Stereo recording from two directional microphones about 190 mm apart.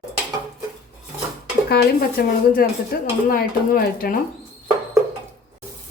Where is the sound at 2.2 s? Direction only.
55° left (ahead or behind).